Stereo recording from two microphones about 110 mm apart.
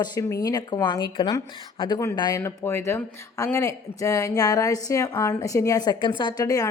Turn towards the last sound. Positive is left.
turn(degrees=35)  # may be behind; listen again after turning